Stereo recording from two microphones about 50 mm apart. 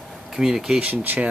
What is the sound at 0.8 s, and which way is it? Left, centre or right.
Speech, right.